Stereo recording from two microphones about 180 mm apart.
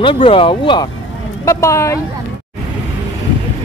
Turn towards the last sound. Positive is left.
turn(degrees=15)  # may be behind; listen again after turning